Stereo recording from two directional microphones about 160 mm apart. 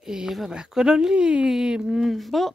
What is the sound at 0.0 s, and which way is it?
Speech, 5° right (ahead or behind).